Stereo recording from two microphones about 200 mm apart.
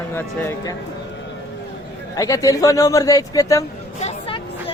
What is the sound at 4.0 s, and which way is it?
Hubbub, 30° left (ahead or behind).